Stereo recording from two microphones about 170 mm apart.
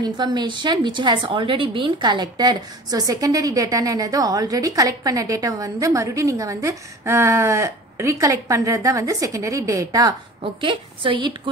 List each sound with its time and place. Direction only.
0.0 s a woman's voice: 25° right (ahead or behind)